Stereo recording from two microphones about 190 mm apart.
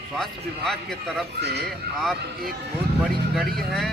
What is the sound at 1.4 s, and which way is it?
Speech, 60° right (ahead or behind).